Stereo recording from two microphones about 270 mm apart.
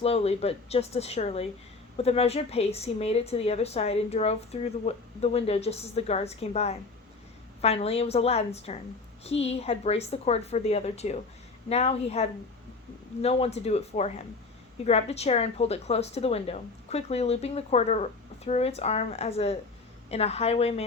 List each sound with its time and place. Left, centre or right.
0.0 s a woman's voice: left